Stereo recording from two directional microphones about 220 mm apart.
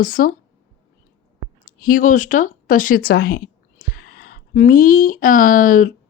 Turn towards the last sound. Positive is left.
turn(degrees=35)  # may be behind; listen again after turning